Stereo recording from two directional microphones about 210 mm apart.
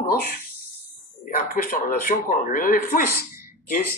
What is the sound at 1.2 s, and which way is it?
Speech, 45° left (ahead or behind).